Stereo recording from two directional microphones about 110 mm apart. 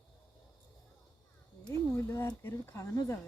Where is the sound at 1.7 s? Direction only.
25° left (ahead or behind).